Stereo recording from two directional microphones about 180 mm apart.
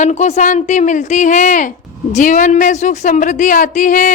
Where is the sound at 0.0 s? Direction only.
40° left (ahead or behind).